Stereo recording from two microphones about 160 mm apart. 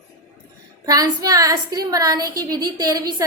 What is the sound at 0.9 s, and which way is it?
A woman's voice, 25° right (ahead or behind).